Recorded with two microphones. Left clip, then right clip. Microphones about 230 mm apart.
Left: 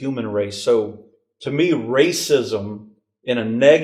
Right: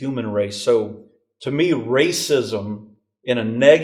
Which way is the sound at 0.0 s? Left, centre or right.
Left.